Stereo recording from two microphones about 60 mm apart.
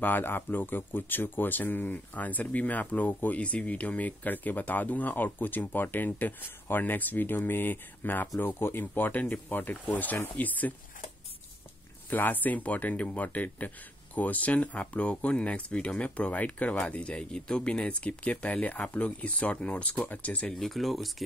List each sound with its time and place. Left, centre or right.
0.0 s speech: left
12.1 s speech: left
20.4 s speech: centre